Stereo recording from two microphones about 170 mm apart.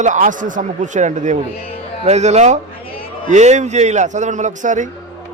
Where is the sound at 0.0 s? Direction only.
45° right (ahead or behind).